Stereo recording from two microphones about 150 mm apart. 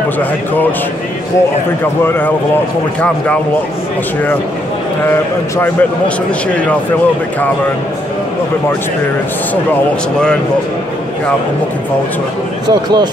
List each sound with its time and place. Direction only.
0.2 s speech: 10° left (ahead or behind)
2.0 s speech: 10° left (ahead or behind)
5.6 s speech: 10° left (ahead or behind)
12.6 s speech: 30° right (ahead or behind)